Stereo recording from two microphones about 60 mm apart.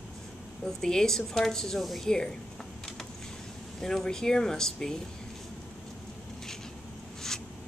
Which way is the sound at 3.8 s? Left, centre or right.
Centre.